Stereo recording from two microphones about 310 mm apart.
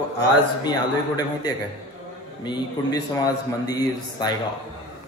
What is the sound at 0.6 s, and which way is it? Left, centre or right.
Speech, centre.